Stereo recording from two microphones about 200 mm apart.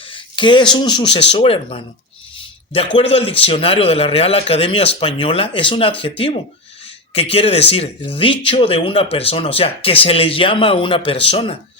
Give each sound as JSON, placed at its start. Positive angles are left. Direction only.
{"t": 0.0, "sound": "speech", "side_deg": 25}